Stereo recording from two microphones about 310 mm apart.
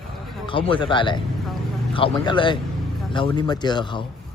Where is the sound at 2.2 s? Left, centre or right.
Centre.